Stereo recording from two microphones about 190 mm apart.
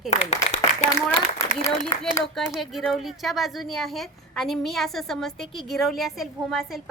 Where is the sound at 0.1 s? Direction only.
35° left (ahead or behind).